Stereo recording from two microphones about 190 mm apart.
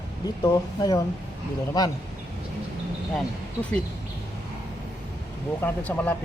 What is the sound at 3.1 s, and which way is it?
Speech, 5° left (ahead or behind).